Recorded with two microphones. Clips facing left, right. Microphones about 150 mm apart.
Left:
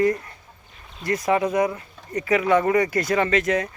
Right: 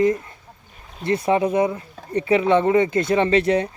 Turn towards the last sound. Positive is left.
turn(degrees=-30)  # may be behind; listen again after turning